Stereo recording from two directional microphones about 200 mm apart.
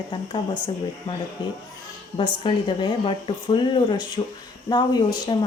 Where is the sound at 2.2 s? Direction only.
25° left (ahead or behind).